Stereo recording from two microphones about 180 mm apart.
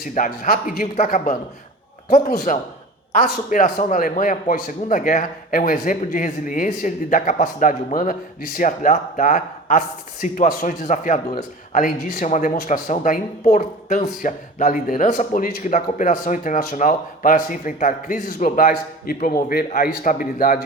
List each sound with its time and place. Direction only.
0.0 s a woman's voice: 50° left (ahead or behind)